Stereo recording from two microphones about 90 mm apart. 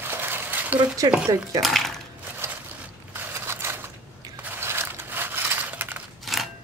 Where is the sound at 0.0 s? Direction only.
25° right (ahead or behind).